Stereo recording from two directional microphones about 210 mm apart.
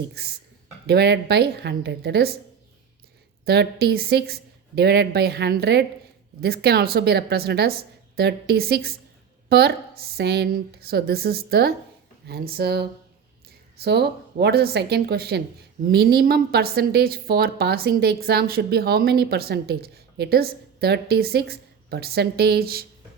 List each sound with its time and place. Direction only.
0.9 s a woman's voice: 50° right (ahead or behind)
3.4 s a woman's voice: 50° right (ahead or behind)